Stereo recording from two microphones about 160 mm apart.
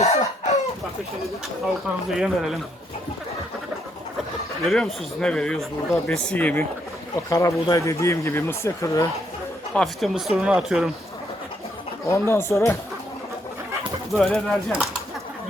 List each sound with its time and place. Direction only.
0.0 s chicken: 45° left (ahead or behind)
1.6 s speech: centre (ahead or behind)
4.7 s speech: 5° left (ahead or behind)
7.3 s speech: 20° left (ahead or behind)
9.7 s speech: centre (ahead or behind)
12.0 s speech: 15° left (ahead or behind)
14.1 s speech: centre (ahead or behind)